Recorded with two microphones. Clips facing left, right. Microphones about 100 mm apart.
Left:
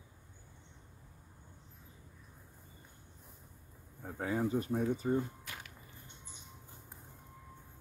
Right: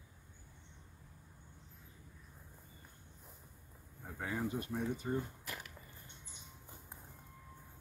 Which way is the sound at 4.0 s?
40° left (ahead or behind).